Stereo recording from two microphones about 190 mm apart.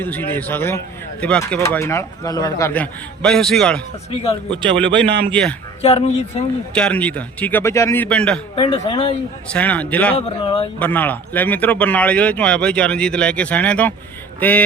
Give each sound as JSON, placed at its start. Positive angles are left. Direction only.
{"t": 0.0, "sound": "speech", "side_deg": 10}
{"t": 4.1, "sound": "speech", "side_deg": 30}
{"t": 5.0, "sound": "a man's voice", "side_deg": -60}
{"t": 5.3, "sound": "a man's voice", "side_deg": 5}
{"t": 5.8, "sound": "speech", "side_deg": 35}
{"t": 6.7, "sound": "speech", "side_deg": 5}
{"t": 8.5, "sound": "speech", "side_deg": 30}
{"t": 9.5, "sound": "speech", "side_deg": 5}
{"t": 10.2, "sound": "speech", "side_deg": 30}
{"t": 10.8, "sound": "speech", "side_deg": 10}